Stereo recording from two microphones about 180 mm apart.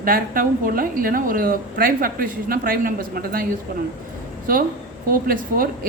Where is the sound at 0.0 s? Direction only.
50° right (ahead or behind).